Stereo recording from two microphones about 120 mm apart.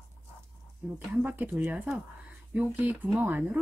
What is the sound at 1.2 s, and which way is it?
Speech, 15° right (ahead or behind).